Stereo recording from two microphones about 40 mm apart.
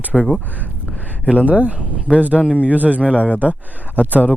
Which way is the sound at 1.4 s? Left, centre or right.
Right.